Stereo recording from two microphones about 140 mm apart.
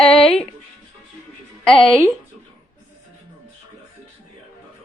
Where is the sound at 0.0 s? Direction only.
5° left (ahead or behind).